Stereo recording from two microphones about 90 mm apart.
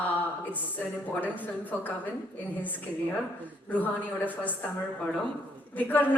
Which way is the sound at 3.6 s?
20° left (ahead or behind).